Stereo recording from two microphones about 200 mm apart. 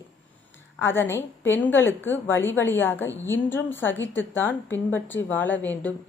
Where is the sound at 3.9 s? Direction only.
65° left (ahead or behind).